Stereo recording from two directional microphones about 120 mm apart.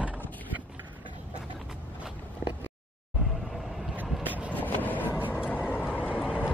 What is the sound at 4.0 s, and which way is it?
Boat, 15° right (ahead or behind).